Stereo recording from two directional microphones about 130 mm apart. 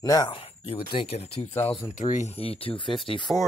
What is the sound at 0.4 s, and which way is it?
Speech, 45° left (ahead or behind).